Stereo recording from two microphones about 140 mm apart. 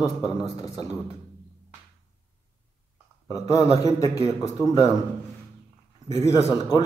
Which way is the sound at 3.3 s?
25° left (ahead or behind).